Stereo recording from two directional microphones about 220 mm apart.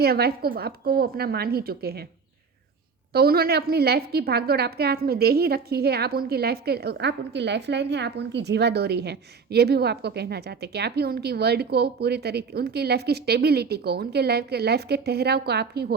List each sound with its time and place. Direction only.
0.0 s a woman's voice: 45° right (ahead or behind)
3.1 s a woman's voice: 45° right (ahead or behind)